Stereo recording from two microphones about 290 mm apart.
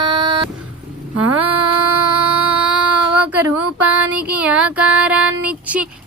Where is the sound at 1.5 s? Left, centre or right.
Right.